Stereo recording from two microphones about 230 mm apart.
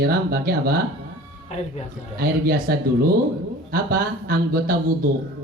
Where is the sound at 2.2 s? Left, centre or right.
Right.